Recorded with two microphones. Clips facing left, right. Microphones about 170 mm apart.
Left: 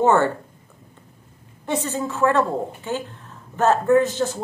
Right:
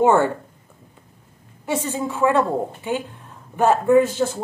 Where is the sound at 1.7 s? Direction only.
10° right (ahead or behind).